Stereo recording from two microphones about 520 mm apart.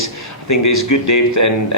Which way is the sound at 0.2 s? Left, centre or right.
Left.